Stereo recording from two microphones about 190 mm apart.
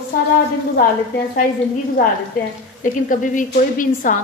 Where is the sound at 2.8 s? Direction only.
45° left (ahead or behind).